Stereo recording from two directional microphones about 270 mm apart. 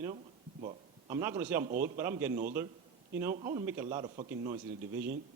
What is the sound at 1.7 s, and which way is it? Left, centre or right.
A man's voice, right.